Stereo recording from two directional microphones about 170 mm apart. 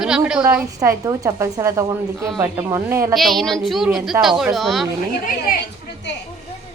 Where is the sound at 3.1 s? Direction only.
Centre (ahead or behind).